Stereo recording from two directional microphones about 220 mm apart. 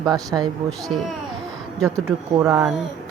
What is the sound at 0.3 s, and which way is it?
Speech, 10° right (ahead or behind).